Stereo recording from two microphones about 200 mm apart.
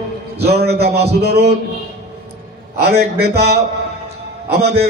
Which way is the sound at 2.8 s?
55° right (ahead or behind).